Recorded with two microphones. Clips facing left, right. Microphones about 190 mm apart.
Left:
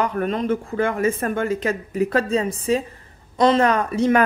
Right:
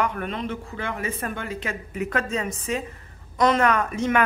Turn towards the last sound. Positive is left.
turn(degrees=35)  # may be behind; listen again after turning